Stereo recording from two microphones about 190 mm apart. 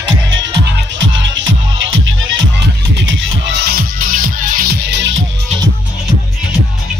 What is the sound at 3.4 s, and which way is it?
Music, 60° right (ahead or behind).